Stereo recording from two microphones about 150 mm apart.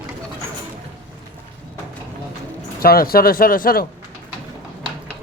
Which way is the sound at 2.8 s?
90° left.